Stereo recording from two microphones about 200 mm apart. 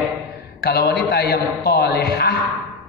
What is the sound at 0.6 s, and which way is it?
A man's voice, 50° left (ahead or behind).